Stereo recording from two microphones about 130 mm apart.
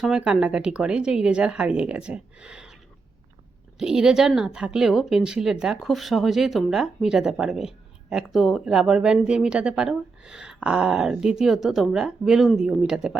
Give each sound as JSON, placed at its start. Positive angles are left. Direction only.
{"t": 0.0, "sound": "speech", "side_deg": -5}
{"t": 3.8, "sound": "speech", "side_deg": -5}